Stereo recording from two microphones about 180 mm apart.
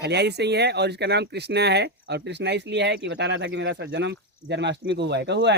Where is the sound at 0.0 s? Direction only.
70° right (ahead or behind).